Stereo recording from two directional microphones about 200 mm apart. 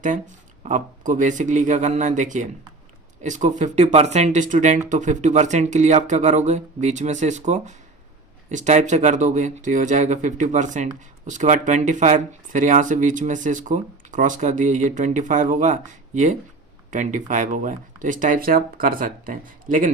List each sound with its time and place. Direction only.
0.0 s speech: 40° right (ahead or behind)